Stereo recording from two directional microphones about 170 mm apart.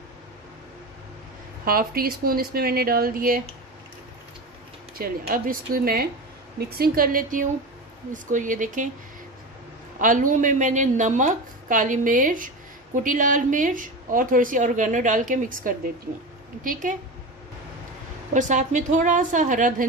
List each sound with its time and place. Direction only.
1.6 s speech: 60° right (ahead or behind)
5.0 s a woman's voice: 60° right (ahead or behind)
9.9 s a woman's voice: 50° right (ahead or behind)
18.3 s a woman's voice: 45° right (ahead or behind)